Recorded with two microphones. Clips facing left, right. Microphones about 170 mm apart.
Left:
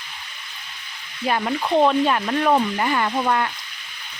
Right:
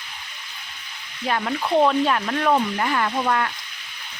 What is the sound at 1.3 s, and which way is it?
Speech, 10° left (ahead or behind).